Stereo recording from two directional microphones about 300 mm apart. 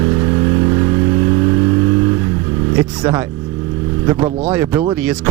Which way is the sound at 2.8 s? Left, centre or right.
Centre.